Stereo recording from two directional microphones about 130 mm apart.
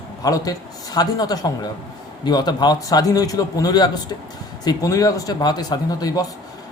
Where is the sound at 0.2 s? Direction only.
30° left (ahead or behind).